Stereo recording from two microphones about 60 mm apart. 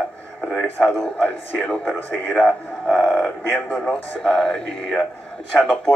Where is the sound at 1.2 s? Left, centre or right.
Centre.